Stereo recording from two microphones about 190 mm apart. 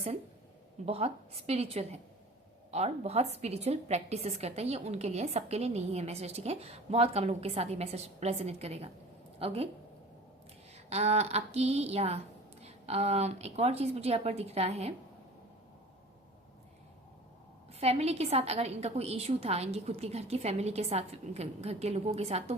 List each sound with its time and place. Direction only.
0.9 s a woman's voice: 30° right (ahead or behind)
10.8 s a woman's voice: 35° right (ahead or behind)
17.7 s a woman's voice: 35° right (ahead or behind)